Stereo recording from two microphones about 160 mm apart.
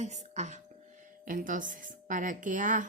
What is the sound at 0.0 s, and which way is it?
A woman's voice, 45° right (ahead or behind).